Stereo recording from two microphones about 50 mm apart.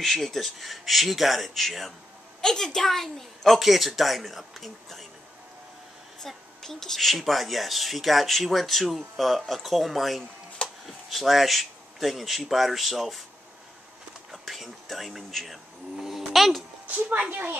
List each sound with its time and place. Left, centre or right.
0.0 s speech: centre
6.2 s speech: centre
14.3 s speech: centre
16.8 s speech: right